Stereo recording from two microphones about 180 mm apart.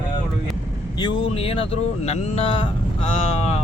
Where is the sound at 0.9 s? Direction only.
25° left (ahead or behind).